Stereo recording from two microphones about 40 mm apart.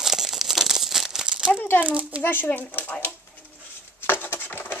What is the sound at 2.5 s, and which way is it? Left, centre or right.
Speech, left.